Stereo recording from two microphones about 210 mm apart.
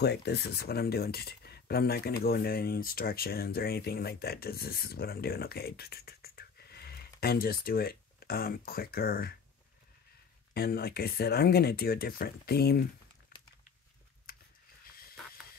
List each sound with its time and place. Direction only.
0.0 s speech: 50° left (ahead or behind)
10.5 s speech: 45° left (ahead or behind)
14.3 s a sound: 45° left (ahead or behind)